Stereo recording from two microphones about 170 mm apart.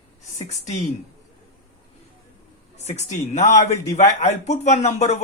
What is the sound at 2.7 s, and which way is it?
A man's voice, 40° left (ahead or behind).